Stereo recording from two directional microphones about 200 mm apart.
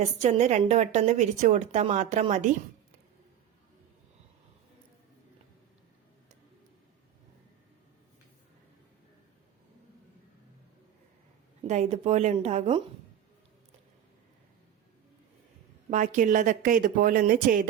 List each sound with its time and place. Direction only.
0.0 s a woman's voice: 35° right (ahead or behind)
11.7 s a woman's voice: 35° right (ahead or behind)
15.9 s speech: 40° right (ahead or behind)